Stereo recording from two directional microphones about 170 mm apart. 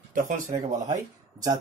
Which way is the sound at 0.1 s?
50° right (ahead or behind).